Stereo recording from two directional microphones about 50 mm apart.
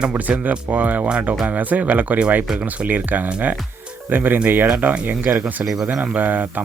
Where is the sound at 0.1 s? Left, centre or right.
Right.